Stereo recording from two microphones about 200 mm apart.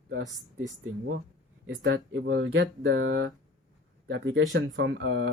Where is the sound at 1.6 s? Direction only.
65° right (ahead or behind).